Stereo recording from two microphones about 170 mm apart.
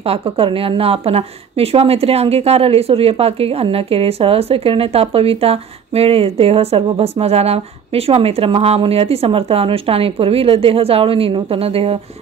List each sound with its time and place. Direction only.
0.0 s a woman's voice: 35° right (ahead or behind)